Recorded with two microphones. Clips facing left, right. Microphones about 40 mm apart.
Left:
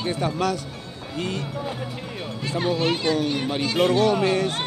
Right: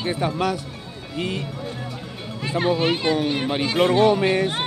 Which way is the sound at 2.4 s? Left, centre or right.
Right.